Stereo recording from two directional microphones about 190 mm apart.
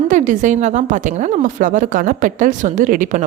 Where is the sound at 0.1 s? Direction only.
40° right (ahead or behind).